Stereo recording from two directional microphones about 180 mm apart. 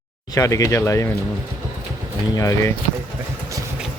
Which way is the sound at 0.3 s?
20° left (ahead or behind).